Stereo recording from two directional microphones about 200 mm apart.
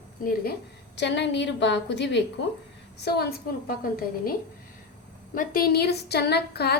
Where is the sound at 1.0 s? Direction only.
60° left (ahead or behind).